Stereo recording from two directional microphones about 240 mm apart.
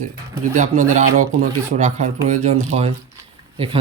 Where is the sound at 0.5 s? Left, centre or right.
Right.